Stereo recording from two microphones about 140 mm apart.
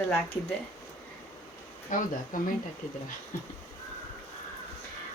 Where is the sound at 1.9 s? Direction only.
65° left (ahead or behind).